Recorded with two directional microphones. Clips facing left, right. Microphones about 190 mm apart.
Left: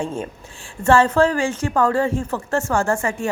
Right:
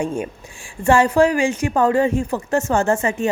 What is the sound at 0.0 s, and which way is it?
Speech, 15° right (ahead or behind).